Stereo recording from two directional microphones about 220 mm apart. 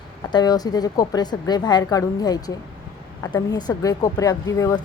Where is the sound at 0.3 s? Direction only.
20° left (ahead or behind).